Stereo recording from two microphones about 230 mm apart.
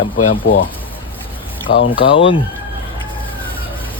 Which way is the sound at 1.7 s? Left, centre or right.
Left.